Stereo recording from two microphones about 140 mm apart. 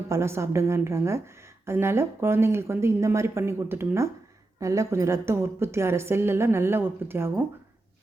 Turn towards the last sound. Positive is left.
turn(degrees=-15)  # may be behind; listen again after turning